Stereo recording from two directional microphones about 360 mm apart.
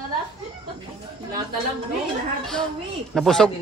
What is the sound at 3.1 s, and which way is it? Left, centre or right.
Speech, centre.